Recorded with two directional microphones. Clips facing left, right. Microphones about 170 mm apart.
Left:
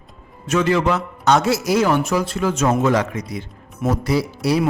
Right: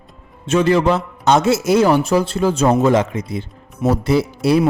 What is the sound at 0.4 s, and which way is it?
Speech, 30° right (ahead or behind).